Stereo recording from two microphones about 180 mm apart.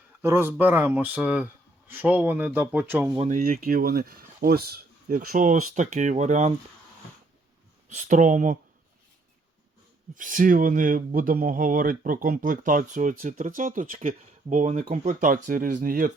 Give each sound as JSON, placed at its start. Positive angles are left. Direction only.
{"t": 0.2, "sound": "speech", "side_deg": -15}
{"t": 3.2, "sound": "speech", "side_deg": -50}
{"t": 7.9, "sound": "speech", "side_deg": -40}
{"t": 10.2, "sound": "speech", "side_deg": -45}